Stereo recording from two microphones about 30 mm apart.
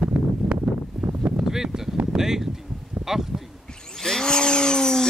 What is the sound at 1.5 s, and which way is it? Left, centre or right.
Speech, centre.